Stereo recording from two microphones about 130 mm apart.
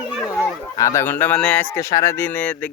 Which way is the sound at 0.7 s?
25° left (ahead or behind).